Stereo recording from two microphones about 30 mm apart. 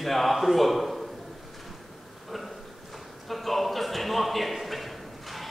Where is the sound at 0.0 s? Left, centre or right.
Centre.